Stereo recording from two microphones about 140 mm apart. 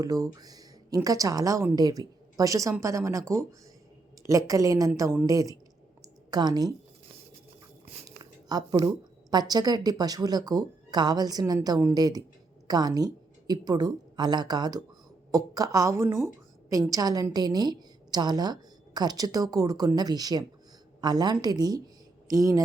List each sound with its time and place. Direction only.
0.0 s a woman's voice: 25° right (ahead or behind)
8.0 s a sound: 30° right (ahead or behind)
9.3 s a woman's voice: 30° right (ahead or behind)